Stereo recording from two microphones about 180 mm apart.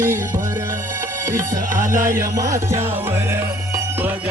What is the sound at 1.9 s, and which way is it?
Music, 50° right (ahead or behind).